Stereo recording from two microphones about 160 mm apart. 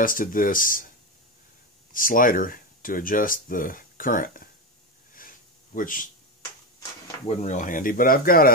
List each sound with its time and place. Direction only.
0.0 s speech: 60° left (ahead or behind)
5.8 s speech: 60° left (ahead or behind)
7.2 s speech: 50° left (ahead or behind)